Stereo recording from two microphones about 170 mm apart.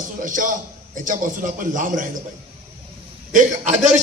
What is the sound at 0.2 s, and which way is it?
A man's voice, 50° right (ahead or behind).